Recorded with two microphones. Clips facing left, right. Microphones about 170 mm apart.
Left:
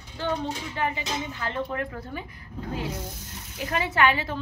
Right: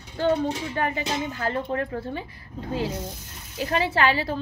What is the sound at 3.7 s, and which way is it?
Speech, 30° right (ahead or behind).